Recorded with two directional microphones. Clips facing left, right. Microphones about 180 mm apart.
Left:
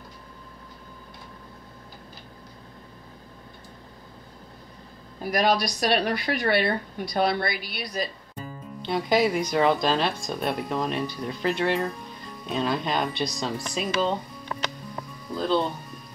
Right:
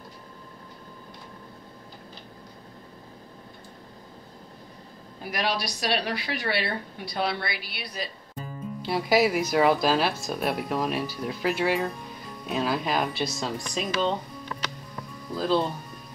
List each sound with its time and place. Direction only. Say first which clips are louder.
5.2 s a woman's voice: left 6 dB; 45° left (ahead or behind)
8.4 s speech: right 2 dB; 5° right (ahead or behind)
15.3 s speech: even; centre (ahead or behind)